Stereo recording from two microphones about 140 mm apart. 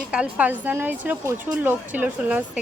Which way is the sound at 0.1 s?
10° right (ahead or behind).